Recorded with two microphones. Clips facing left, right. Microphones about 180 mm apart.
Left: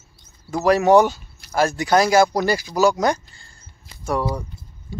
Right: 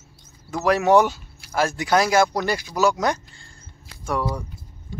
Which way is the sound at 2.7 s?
35° left (ahead or behind).